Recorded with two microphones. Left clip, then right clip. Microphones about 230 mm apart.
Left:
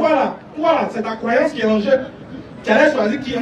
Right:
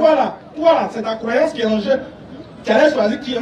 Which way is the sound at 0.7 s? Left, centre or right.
Right.